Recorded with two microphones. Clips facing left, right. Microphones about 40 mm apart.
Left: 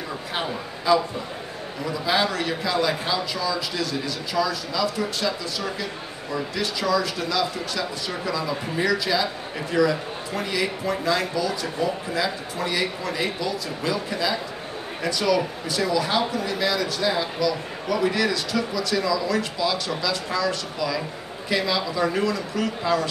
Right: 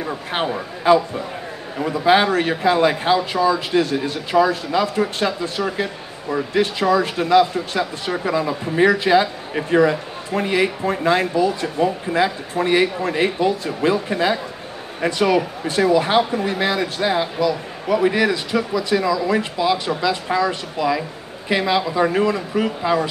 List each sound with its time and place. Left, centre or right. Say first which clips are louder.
0.3 s speech: right 6 dB; right